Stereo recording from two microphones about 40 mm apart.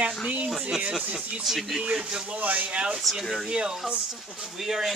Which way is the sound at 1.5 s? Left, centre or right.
Centre.